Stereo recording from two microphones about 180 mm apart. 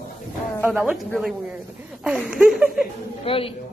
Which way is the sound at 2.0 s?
5° right (ahead or behind).